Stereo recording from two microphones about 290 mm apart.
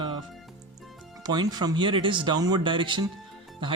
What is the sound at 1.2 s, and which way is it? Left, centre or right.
Speech, centre.